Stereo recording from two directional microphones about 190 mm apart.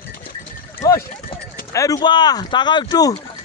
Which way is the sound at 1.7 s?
15° left (ahead or behind).